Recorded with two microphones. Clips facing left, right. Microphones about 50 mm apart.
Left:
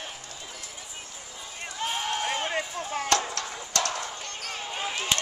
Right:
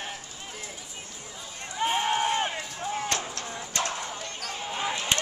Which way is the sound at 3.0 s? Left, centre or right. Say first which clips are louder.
Left 5 dB; left.